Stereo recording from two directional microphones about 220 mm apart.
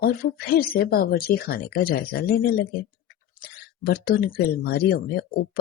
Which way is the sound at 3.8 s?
45° left (ahead or behind).